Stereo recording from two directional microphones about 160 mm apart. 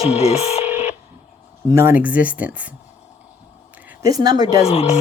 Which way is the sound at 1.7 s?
15° right (ahead or behind).